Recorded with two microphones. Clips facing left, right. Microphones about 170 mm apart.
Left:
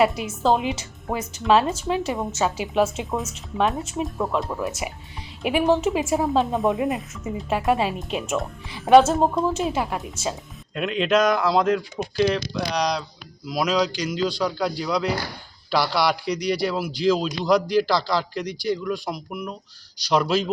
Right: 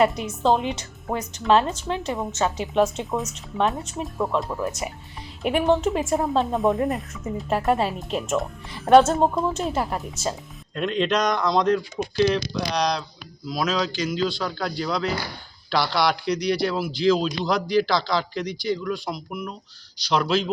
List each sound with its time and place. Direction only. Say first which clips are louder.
0.0 s speech: even; 5° left (ahead or behind)
13.8 s speech: even; centre (ahead or behind)
14.3 s a man's voice: left 3 dB; 10° left (ahead or behind)